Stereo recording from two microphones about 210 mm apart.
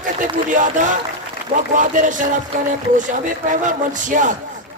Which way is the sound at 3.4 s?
35° right (ahead or behind).